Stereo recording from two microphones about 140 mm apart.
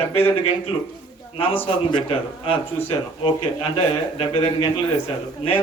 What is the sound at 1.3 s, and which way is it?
A man's voice, 40° left (ahead or behind).